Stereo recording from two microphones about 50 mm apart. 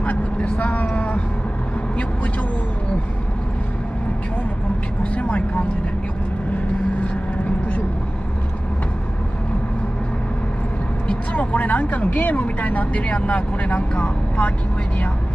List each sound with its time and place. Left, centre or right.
0.0 s speech: left
5.1 s speech: left
11.1 s speech: left